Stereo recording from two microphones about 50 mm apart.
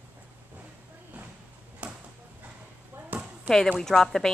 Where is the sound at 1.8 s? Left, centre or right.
Right.